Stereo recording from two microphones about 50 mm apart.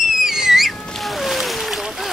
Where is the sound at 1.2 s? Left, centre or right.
Centre.